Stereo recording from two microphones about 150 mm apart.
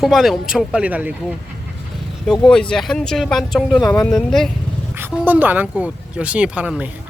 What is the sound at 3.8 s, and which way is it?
Speech, 25° left (ahead or behind).